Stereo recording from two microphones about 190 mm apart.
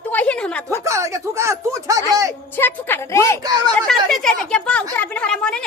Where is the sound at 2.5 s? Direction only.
10° left (ahead or behind).